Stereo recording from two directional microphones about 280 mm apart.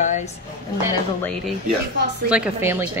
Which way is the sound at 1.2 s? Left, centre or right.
Centre.